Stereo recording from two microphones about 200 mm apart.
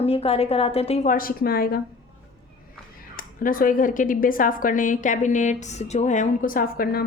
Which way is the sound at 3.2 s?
45° left (ahead or behind).